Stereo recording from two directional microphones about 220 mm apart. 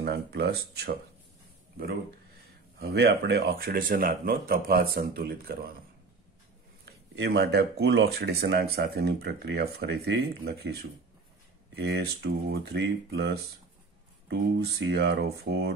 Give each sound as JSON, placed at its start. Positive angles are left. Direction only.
{"t": 0.0, "sound": "speech", "side_deg": -45}
{"t": 2.8, "sound": "speech", "side_deg": -45}
{"t": 7.2, "sound": "speech", "side_deg": -50}